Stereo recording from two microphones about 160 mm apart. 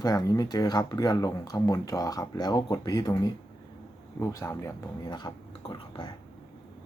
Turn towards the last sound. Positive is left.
turn(degrees=30)  # may be behind; listen again after turning